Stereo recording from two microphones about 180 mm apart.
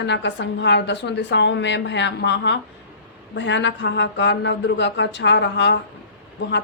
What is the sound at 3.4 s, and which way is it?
A man's voice, 90° left.